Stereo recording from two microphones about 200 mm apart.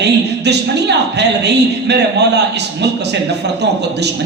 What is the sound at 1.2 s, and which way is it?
A man's voice, 55° right (ahead or behind).